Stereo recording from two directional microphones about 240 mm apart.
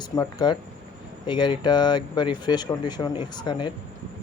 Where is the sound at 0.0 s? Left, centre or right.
Centre.